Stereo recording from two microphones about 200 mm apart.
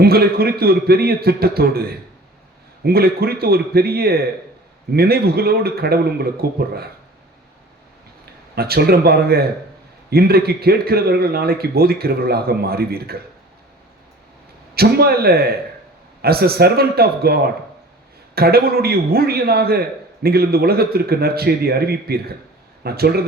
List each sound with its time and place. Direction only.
0.0 s a man's voice: 50° right (ahead or behind)
8.5 s a man's voice: 50° right (ahead or behind)
14.8 s a man's voice: 50° right (ahead or behind)